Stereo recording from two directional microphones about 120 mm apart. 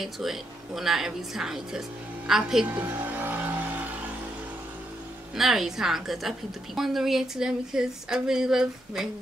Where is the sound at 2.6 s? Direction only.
15° right (ahead or behind).